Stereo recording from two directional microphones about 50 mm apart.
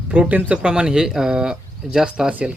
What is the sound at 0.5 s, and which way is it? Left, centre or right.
Speech, centre.